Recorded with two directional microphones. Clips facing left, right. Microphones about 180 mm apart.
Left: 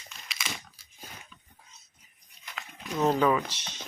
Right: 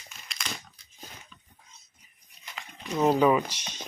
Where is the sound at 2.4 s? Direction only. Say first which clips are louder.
Right 1 dB; centre (ahead or behind).